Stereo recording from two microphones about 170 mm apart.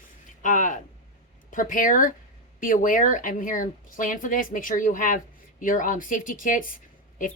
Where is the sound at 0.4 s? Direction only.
50° left (ahead or behind).